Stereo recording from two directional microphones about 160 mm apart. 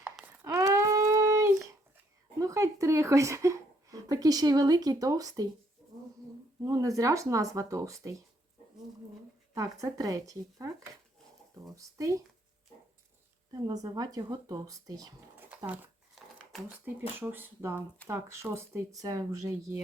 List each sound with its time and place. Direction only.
0.4 s a sound: 20° right (ahead or behind)
2.4 s a woman's voice: 20° right (ahead or behind)
6.6 s speech: 20° right (ahead or behind)
9.6 s speech: 20° right (ahead or behind)
11.7 s speech: 20° right (ahead or behind)
13.5 s speech: 25° right (ahead or behind)
15.4 s a sound: 10° right (ahead or behind)
16.5 s speech: 5° right (ahead or behind)